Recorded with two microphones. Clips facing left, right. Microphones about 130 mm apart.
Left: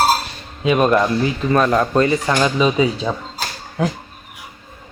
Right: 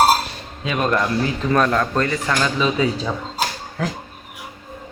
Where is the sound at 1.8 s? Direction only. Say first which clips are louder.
Left 5 dB; 15° left (ahead or behind).